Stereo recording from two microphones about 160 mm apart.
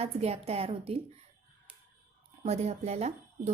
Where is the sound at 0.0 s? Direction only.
40° right (ahead or behind).